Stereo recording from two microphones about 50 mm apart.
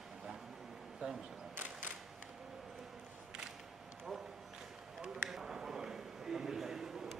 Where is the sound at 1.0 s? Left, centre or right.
Centre.